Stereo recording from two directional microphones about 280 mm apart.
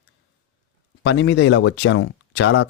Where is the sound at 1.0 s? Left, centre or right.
Left.